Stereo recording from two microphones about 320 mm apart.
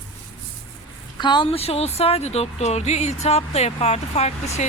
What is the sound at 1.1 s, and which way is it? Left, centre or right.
Speech, centre.